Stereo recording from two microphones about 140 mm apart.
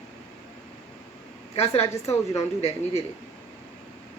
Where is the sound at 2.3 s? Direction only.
50° left (ahead or behind).